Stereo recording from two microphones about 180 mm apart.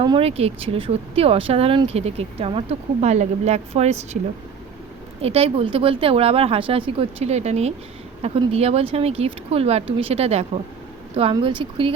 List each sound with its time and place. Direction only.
0.0 s speech: 30° right (ahead or behind)
5.2 s speech: 35° right (ahead or behind)